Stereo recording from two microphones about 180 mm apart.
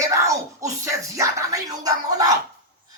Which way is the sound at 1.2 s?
20° right (ahead or behind).